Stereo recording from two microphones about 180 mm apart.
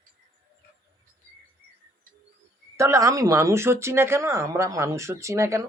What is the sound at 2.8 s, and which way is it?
Speech, 15° right (ahead or behind).